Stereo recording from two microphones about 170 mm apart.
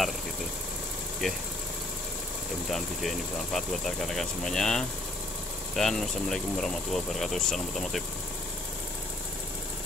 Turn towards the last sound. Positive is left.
turn(degrees=0)  # may be behind; listen again after turning